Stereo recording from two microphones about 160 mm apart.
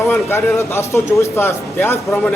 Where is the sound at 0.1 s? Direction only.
15° left (ahead or behind).